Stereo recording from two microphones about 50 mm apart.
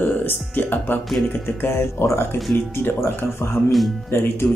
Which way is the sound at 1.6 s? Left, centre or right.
Left.